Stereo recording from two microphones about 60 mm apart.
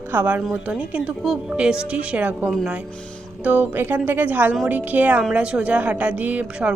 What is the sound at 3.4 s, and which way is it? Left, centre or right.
A woman's voice, right.